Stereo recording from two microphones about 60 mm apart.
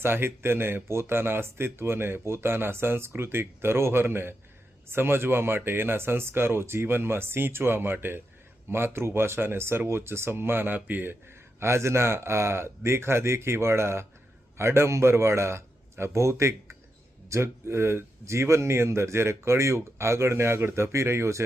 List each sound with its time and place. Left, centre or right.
0.0 s speech: right
11.6 s a man's voice: right